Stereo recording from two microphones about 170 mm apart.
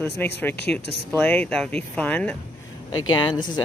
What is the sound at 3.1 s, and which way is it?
Speech, 25° left (ahead or behind).